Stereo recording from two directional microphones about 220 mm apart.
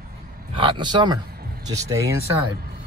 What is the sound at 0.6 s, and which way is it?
Speech, 20° right (ahead or behind).